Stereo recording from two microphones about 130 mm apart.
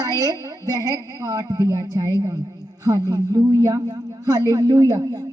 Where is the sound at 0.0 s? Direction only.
30° right (ahead or behind).